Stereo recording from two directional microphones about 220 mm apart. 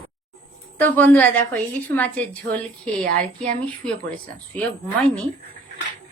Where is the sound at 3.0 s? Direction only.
35° right (ahead or behind).